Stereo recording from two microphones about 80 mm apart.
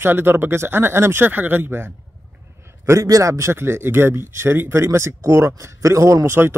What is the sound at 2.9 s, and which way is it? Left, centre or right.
A man's voice, right.